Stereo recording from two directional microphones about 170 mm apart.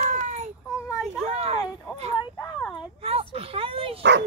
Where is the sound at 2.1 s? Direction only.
25° left (ahead or behind).